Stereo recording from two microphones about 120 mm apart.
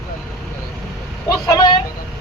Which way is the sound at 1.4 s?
25° left (ahead or behind).